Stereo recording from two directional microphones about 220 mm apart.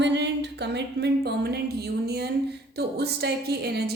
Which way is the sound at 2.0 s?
45° right (ahead or behind).